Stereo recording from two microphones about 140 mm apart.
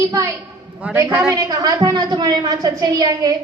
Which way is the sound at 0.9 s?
20° right (ahead or behind).